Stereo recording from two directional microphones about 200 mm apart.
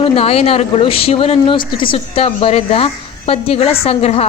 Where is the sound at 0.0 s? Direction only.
30° left (ahead or behind).